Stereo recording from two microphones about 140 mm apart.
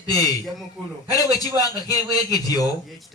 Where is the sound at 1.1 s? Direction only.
25° left (ahead or behind).